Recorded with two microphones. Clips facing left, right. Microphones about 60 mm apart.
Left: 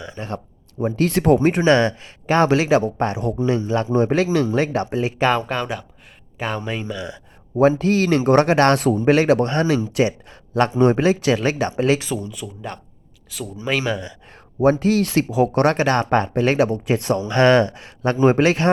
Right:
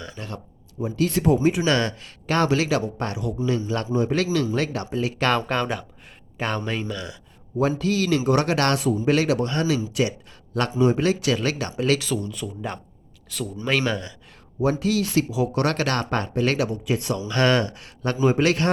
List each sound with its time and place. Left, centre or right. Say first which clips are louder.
0.0 s speech: left 5 dB; left
0.8 s speech: left 4 dB; left
1.6 s speech: left 6 dB; left
5.2 s speech: left 3 dB; centre
5.5 s speech: even; centre
7.5 s speech: left 6 dB; left
8.8 s speech: left 4 dB; left
9.0 s speech: left 6 dB; left
10.8 s speech: left 3 dB; left
11.0 s speech: left 4 dB; left
12.1 s speech: even; centre
14.6 s speech: left 6 dB; left
16.6 s speech: left 6 dB; left